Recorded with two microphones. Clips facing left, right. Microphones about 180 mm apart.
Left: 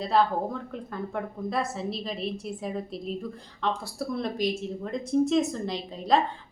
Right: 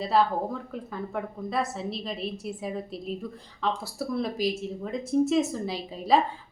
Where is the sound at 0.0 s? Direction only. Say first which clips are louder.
Even; centre (ahead or behind).